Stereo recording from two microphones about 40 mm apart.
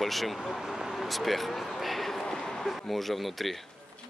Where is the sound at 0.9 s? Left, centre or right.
Centre.